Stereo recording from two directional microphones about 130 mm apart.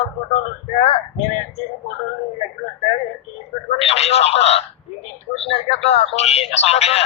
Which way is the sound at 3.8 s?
50° left (ahead or behind).